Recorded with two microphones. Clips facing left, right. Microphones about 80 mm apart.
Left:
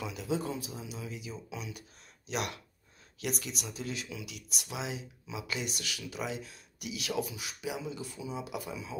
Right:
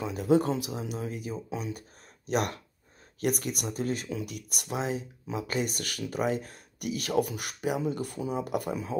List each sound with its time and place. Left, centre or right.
0.0 s speech: right
0.4 s speech: right